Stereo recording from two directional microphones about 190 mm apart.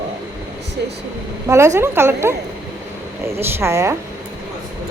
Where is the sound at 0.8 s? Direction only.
60° right (ahead or behind).